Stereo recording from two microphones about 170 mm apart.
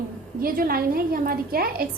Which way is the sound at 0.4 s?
60° right (ahead or behind).